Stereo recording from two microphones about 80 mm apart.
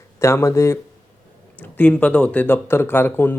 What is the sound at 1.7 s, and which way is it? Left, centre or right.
Speech, centre.